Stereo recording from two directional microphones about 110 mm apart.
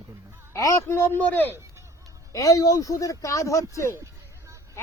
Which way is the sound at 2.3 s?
30° left (ahead or behind).